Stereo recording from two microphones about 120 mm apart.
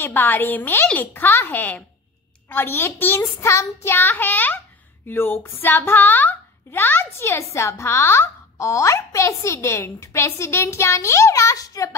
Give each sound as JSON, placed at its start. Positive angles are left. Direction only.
{"t": 0.0, "sound": "a woman's voice", "side_deg": 15}